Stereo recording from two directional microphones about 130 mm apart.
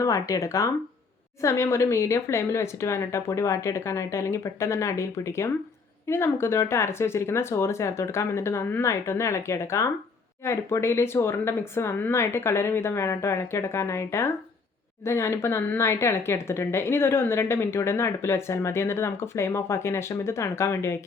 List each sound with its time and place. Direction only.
0.0 s speech: 25° left (ahead or behind)